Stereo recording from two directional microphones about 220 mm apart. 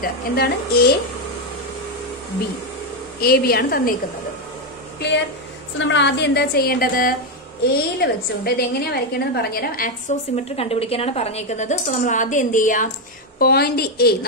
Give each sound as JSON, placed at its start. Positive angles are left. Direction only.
{"t": 0.0, "sound": "a woman's voice", "side_deg": 45}
{"t": 3.2, "sound": "a woman's voice", "side_deg": 45}
{"t": 5.8, "sound": "a woman's voice", "side_deg": 55}